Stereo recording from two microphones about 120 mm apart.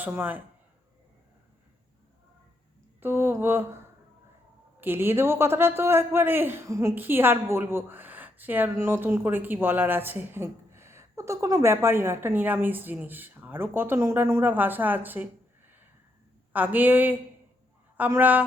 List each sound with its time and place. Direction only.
0.0 s a man's voice: 15° right (ahead or behind)
3.0 s a man's voice: 15° right (ahead or behind)
4.8 s a man's voice: 20° right (ahead or behind)